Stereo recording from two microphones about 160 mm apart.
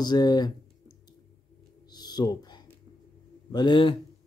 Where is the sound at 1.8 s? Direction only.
25° left (ahead or behind).